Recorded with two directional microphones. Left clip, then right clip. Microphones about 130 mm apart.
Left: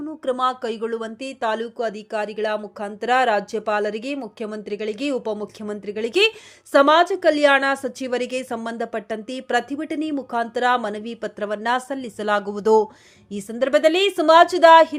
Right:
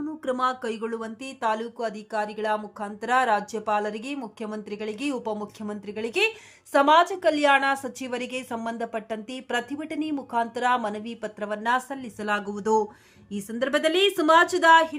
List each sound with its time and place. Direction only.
0.3 s a woman's voice: 25° left (ahead or behind)